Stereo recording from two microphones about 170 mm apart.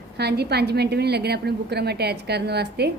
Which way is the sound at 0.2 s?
75° right (ahead or behind).